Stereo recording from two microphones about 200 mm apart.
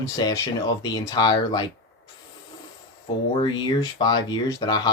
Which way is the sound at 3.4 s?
20° left (ahead or behind).